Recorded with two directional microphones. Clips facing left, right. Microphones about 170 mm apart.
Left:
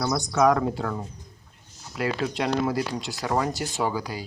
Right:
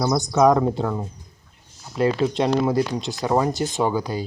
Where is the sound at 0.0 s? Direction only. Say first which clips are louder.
Right 4 dB; 20° right (ahead or behind).